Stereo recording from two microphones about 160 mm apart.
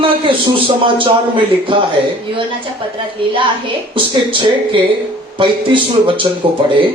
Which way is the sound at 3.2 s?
30° right (ahead or behind).